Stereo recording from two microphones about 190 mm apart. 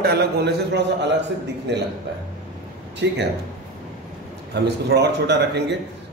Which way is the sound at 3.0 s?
65° right (ahead or behind).